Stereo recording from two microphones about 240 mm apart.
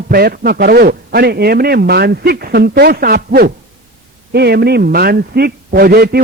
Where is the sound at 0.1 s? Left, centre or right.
Right.